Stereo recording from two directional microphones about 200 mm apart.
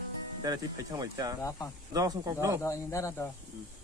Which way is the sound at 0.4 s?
20° right (ahead or behind).